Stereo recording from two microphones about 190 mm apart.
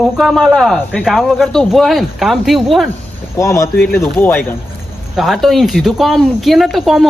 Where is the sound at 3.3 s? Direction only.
15° left (ahead or behind).